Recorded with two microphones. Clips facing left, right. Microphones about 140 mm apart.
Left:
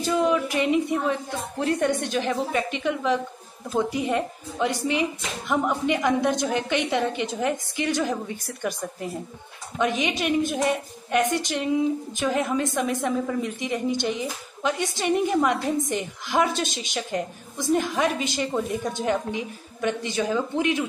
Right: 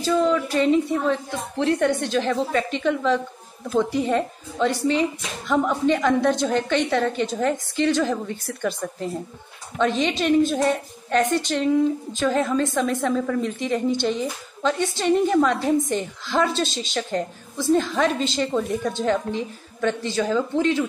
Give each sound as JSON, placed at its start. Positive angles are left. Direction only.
{"t": 0.0, "sound": "a woman's voice", "side_deg": 15}
{"t": 9.8, "sound": "a woman's voice", "side_deg": 10}